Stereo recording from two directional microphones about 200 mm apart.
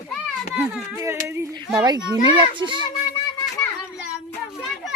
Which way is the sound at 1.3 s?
15° right (ahead or behind).